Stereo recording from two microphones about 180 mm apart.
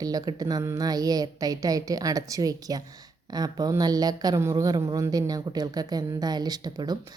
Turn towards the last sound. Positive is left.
turn(degrees=-20)  # may be behind; listen again after turning